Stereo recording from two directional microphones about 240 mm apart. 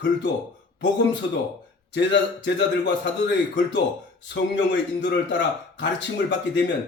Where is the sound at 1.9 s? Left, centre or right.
Left.